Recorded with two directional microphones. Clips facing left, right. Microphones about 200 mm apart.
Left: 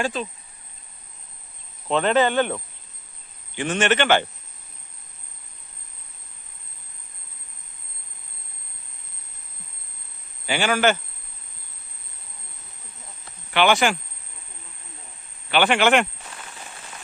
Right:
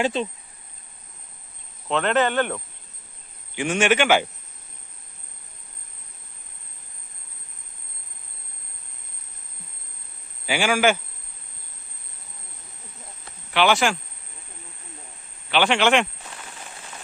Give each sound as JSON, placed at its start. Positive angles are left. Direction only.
{"t": 0.0, "sound": "speech", "side_deg": -25}
{"t": 1.9, "sound": "speech", "side_deg": 5}
{"t": 3.5, "sound": "a man's voice", "side_deg": -10}
{"t": 10.4, "sound": "a man's voice", "side_deg": -10}
{"t": 13.5, "sound": "speech", "side_deg": 0}
{"t": 15.4, "sound": "speech", "side_deg": 0}